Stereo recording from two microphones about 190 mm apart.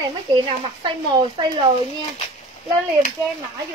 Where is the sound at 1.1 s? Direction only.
25° right (ahead or behind).